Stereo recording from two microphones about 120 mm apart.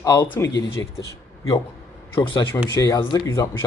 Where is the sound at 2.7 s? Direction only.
30° left (ahead or behind).